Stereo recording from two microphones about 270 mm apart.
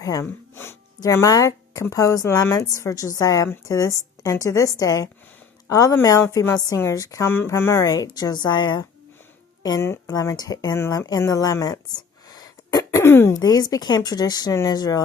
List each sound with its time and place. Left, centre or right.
0.0 s a woman's voice: centre